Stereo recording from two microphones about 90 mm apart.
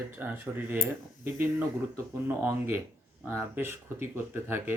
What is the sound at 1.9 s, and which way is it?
Speech, 30° right (ahead or behind).